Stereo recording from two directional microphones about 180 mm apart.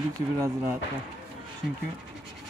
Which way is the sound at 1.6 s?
Centre (ahead or behind).